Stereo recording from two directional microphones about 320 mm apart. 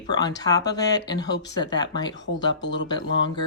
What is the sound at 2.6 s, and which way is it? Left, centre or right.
Speech, left.